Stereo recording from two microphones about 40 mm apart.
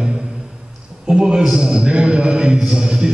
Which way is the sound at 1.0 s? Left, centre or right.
Centre.